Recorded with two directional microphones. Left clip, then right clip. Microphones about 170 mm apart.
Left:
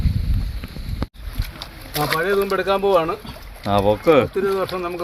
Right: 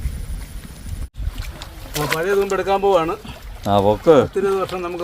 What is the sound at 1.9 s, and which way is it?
Speech, 15° right (ahead or behind).